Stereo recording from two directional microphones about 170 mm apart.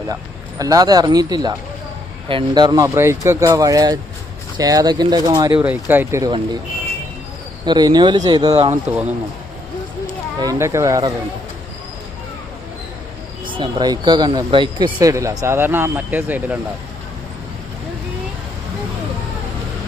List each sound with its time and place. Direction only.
0.6 s speech: 20° right (ahead or behind)
5.5 s speech: 10° right (ahead or behind)
7.6 s speech: 25° right (ahead or behind)
8.9 s speech: 10° right (ahead or behind)
10.4 s speech: 15° right (ahead or behind)
13.5 s speech: 30° right (ahead or behind); by 16.6 s 10° right (ahead or behind)